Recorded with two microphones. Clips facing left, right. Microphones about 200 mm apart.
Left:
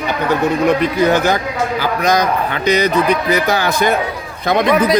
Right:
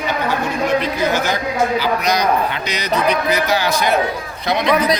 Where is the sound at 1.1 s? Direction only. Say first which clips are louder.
Left 4 dB; 55° left (ahead or behind).